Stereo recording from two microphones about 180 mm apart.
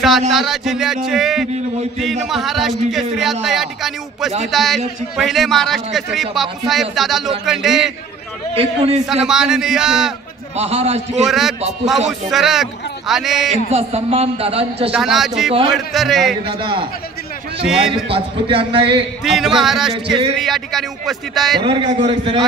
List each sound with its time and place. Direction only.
0.3 s a man's voice: centre (ahead or behind)
8.5 s a man's voice: 35° right (ahead or behind)
9.0 s a man's voice: 5° right (ahead or behind)
10.5 s a man's voice: 35° right (ahead or behind)
11.2 s a man's voice: centre (ahead or behind)
13.7 s a man's voice: 35° right (ahead or behind)
14.9 s a man's voice: centre (ahead or behind)
16.4 s a man's voice: 25° right (ahead or behind)
17.6 s a man's voice: 5° right (ahead or behind)
18.0 s a man's voice: 30° right (ahead or behind)
19.2 s a man's voice: centre (ahead or behind)
21.5 s a man's voice: 30° right (ahead or behind)